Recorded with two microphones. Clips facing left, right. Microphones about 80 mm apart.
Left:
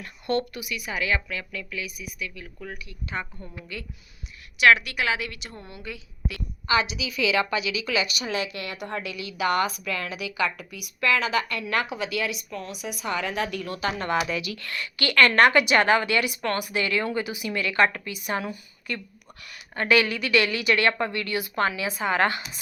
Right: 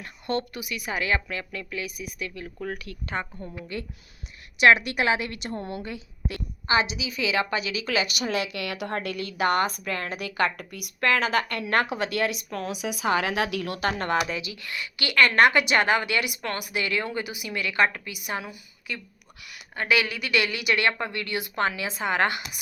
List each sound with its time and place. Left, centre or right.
0.0 s a woman's voice: right
2.7 s speech: right
3.7 s a woman's voice: right
12.5 s a woman's voice: right
14.0 s a woman's voice: right
14.3 s a woman's voice: right
19.5 s a woman's voice: centre